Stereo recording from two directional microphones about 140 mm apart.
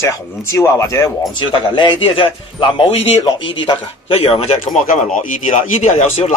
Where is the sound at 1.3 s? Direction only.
35° left (ahead or behind).